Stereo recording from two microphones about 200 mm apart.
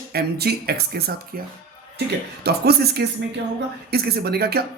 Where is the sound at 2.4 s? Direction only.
50° right (ahead or behind).